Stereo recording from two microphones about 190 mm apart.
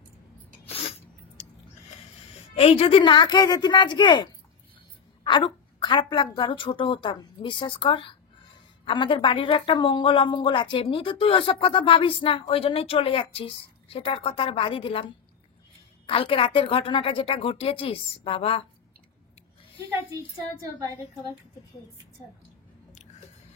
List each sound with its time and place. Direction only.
0.7 s sneeze: 30° left (ahead or behind)
2.5 s a woman's voice: 30° left (ahead or behind)
16.1 s a woman's voice: 30° left (ahead or behind)